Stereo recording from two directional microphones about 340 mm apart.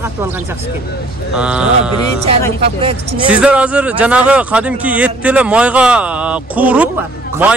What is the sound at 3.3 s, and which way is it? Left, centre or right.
Speech, centre.